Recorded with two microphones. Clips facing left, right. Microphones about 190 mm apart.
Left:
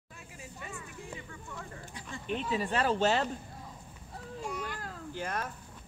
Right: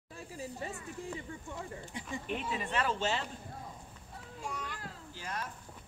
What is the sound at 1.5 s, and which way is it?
Speech, 25° right (ahead or behind).